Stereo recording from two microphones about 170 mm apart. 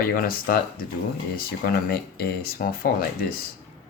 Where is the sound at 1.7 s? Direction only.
65° left (ahead or behind).